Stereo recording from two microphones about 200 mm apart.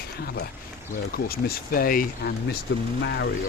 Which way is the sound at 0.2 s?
50° left (ahead or behind).